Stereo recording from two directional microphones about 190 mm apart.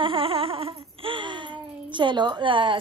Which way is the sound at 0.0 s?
30° right (ahead or behind).